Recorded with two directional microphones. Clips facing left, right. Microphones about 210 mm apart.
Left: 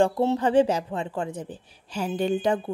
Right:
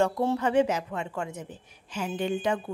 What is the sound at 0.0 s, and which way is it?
A woman's voice, 25° left (ahead or behind).